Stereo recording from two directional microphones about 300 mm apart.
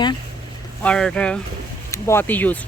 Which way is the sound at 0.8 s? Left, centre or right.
Centre.